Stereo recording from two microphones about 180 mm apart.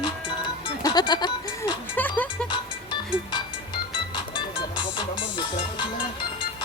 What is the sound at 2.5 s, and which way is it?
Music, 25° left (ahead or behind).